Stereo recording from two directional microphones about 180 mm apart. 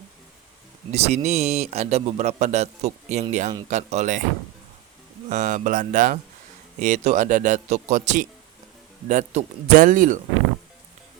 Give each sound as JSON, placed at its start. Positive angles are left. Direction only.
{"t": 0.9, "sound": "a man's voice", "side_deg": -35}
{"t": 5.3, "sound": "speech", "side_deg": -40}